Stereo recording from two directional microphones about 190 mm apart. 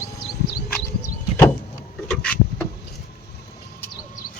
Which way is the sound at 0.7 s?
15° left (ahead or behind).